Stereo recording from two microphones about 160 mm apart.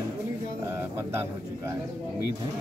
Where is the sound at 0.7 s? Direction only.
15° right (ahead or behind).